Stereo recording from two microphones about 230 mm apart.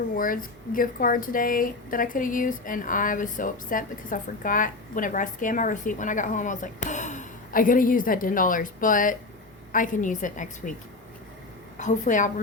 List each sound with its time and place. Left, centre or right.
0.2 s speech: left
11.8 s speech: left